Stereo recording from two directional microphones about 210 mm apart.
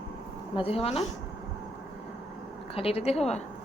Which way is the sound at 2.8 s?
30° left (ahead or behind).